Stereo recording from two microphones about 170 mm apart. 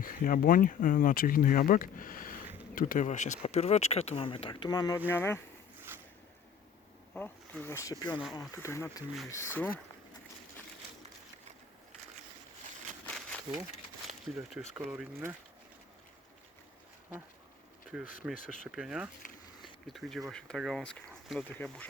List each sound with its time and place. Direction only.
0.0 s speech: 55° left (ahead or behind); by 5.4 s 15° left (ahead or behind)
7.1 s speech: 10° left (ahead or behind)
8.2 s speech: centre (ahead or behind)
8.5 s speech: 15° left (ahead or behind)
13.1 s a sound: 5° left (ahead or behind)
14.3 s speech: 20° right (ahead or behind)
14.8 s speech: 5° right (ahead or behind)
17.9 s speech: 5° right (ahead or behind)